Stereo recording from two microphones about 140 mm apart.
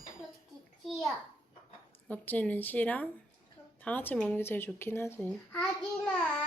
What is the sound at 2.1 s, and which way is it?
Speech, 10° left (ahead or behind).